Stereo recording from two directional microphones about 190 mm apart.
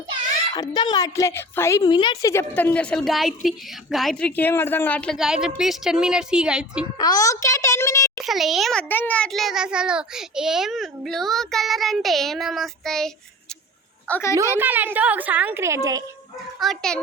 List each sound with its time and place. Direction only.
0.5 s a woman's voice: 20° left (ahead or behind)
2.3 s a child's voice: 10° left (ahead or behind); by 6.8 s 5° right (ahead or behind)
7.0 s a child's voice: 20° left (ahead or behind)
8.2 s a child's voice: centre (ahead or behind)
14.1 s a child's voice: 15° left (ahead or behind)
14.5 s a woman's voice: 10° right (ahead or behind)
16.6 s a child's voice: centre (ahead or behind)